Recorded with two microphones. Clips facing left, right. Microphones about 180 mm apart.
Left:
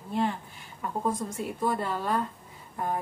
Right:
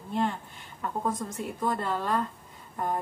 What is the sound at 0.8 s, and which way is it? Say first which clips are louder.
A woman's voice: left 1 dB; 10° left (ahead or behind).